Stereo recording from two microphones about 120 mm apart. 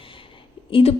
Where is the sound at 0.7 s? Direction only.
55° left (ahead or behind).